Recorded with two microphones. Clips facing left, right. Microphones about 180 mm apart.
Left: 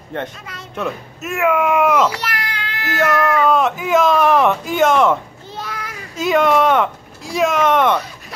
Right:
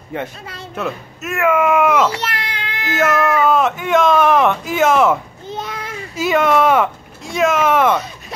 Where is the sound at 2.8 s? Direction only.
5° right (ahead or behind).